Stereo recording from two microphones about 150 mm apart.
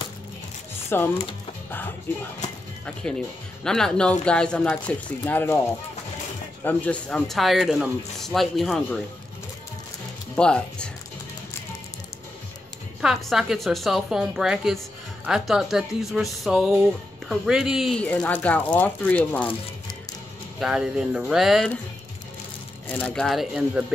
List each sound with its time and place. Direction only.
0.8 s speech: 15° left (ahead or behind)
3.6 s speech: 5° left (ahead or behind)
6.6 s speech: 10° left (ahead or behind)
10.3 s speech: 5° left (ahead or behind)
13.0 s speech: 5° right (ahead or behind)
20.5 s speech: 5° right (ahead or behind)
22.8 s speech: 10° left (ahead or behind)